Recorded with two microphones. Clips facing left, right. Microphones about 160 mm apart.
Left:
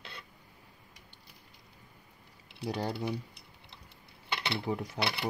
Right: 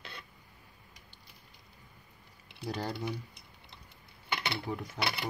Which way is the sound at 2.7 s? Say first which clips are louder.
Left 2 dB; 10° left (ahead or behind).